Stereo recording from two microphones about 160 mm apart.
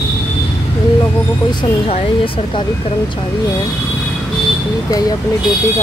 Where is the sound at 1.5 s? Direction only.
30° left (ahead or behind).